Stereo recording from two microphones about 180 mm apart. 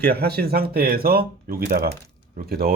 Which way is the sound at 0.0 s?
60° right (ahead or behind).